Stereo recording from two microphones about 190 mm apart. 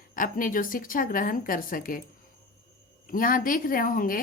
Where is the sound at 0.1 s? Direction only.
45° left (ahead or behind).